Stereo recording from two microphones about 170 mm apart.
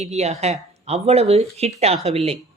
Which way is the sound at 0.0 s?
40° right (ahead or behind).